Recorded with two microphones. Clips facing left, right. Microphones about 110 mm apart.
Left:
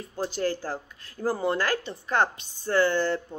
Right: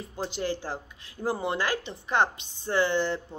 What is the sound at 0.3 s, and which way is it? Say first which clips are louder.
A woman's voice: left 2 dB; 20° right (ahead or behind).